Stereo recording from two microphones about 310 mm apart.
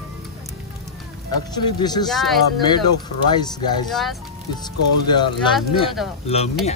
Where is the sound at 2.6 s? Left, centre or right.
Centre.